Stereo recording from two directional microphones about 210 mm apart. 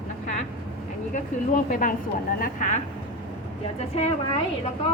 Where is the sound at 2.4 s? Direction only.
35° left (ahead or behind).